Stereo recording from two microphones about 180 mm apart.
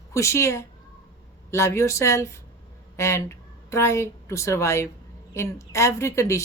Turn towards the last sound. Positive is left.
turn(degrees=15)  # may be behind; listen again after turning